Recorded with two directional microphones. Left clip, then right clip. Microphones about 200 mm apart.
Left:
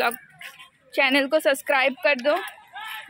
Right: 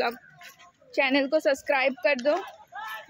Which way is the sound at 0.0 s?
5° right (ahead or behind).